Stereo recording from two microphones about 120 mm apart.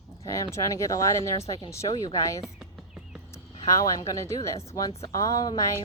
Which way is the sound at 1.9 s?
40° left (ahead or behind).